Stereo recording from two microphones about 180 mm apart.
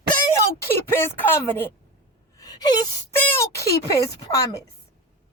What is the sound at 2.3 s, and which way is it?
Gasp, 20° left (ahead or behind).